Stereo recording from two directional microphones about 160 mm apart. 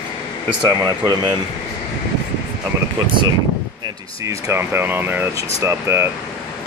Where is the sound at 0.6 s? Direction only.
25° right (ahead or behind).